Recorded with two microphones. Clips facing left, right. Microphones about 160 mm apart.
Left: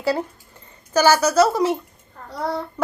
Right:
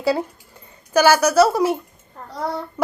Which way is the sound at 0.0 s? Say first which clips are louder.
Right 2 dB; 10° right (ahead or behind).